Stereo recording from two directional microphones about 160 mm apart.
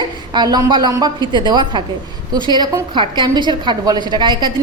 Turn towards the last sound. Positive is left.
turn(degrees=-30)  # may be behind; listen again after turning